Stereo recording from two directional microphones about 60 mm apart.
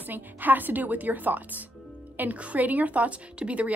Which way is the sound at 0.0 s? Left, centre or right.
Right.